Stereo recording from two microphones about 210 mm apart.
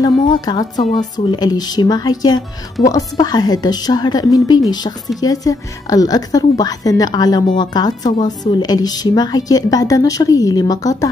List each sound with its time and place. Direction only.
0.5 s a woman's voice: 20° left (ahead or behind)